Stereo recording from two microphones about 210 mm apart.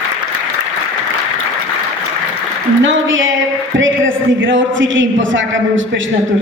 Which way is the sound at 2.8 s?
65° right (ahead or behind).